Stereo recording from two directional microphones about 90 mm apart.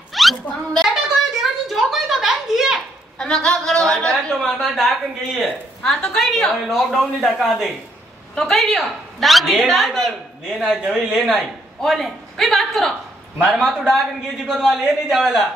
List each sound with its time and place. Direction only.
0.1 s a sound: centre (ahead or behind)
3.2 s a woman's voice: 10° left (ahead or behind)
10.8 s a woman's voice: 5° right (ahead or behind)